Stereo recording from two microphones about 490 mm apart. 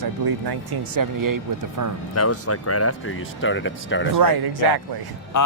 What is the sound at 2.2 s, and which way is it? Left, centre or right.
Speech, left.